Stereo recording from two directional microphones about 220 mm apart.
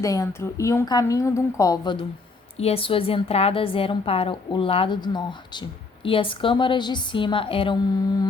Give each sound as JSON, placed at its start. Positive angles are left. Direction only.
{"t": 0.0, "sound": "a woman's voice", "side_deg": 15}